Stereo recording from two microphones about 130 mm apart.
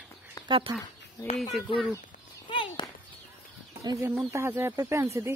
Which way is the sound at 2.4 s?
40° left (ahead or behind).